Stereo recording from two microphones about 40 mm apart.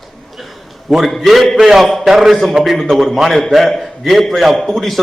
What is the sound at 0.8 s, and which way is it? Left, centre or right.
A man's voice, centre.